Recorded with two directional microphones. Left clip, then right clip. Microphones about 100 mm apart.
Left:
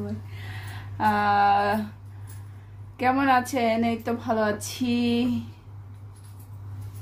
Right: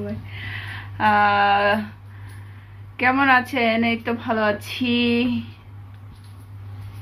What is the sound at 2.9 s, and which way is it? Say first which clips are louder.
A woman's voice: right 5 dB; 15° left (ahead or behind).